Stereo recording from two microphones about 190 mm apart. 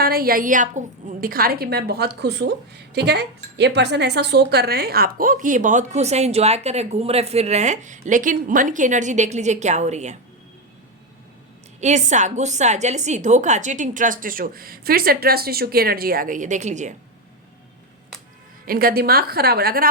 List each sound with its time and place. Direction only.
0.0 s a woman's voice: 50° right (ahead or behind)
11.8 s speech: 40° right (ahead or behind)
18.6 s a woman's voice: 50° right (ahead or behind)